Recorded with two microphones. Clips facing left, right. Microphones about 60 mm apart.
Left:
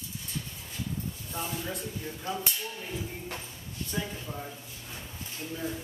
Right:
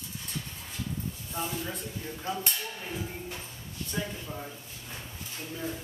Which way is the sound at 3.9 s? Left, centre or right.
Centre.